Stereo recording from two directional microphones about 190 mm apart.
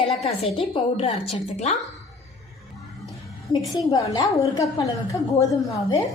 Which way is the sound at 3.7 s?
25° left (ahead or behind).